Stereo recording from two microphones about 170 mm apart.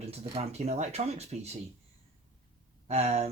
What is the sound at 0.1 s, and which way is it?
Speech, 40° right (ahead or behind).